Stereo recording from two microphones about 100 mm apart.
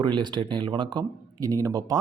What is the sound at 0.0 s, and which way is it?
Speech, 50° right (ahead or behind).